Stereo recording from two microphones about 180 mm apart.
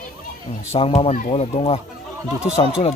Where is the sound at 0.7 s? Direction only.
35° left (ahead or behind).